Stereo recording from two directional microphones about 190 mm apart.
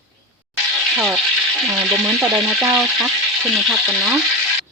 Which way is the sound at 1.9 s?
Centre (ahead or behind).